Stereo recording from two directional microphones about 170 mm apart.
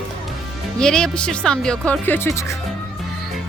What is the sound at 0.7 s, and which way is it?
Speech, 5° left (ahead or behind).